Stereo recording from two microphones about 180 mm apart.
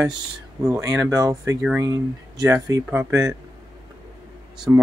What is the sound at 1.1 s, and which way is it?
Speech, 15° right (ahead or behind).